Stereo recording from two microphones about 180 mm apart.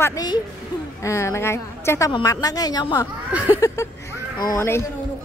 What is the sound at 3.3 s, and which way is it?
Speech, 5° right (ahead or behind).